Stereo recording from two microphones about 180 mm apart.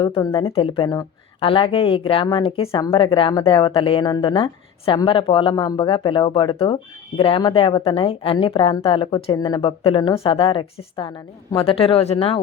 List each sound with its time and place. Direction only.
0.0 s speech: 25° left (ahead or behind)